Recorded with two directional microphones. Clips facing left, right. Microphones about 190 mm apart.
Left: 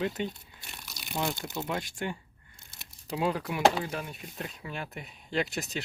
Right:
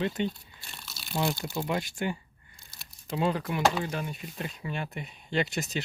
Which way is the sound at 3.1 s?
5° left (ahead or behind).